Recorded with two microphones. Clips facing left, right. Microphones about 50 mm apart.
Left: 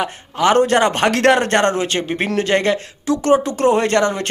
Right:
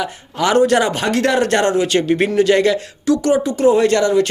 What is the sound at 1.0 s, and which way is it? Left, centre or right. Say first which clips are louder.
Speech: left 3 dB; left.